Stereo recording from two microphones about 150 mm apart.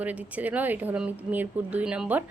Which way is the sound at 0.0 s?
10° right (ahead or behind).